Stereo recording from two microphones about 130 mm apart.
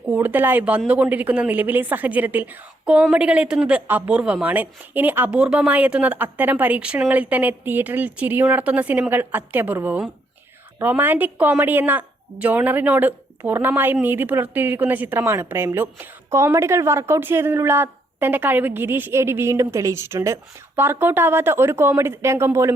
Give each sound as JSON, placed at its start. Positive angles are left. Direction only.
{"t": 0.1, "sound": "a woman's voice", "side_deg": -15}